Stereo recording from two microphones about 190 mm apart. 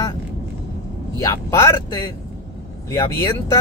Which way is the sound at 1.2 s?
15° left (ahead or behind).